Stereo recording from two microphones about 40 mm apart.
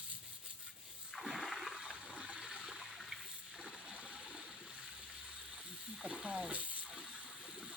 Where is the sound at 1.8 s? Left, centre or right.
Right.